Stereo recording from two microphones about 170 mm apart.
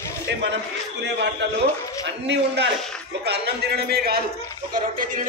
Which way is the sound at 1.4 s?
90° right.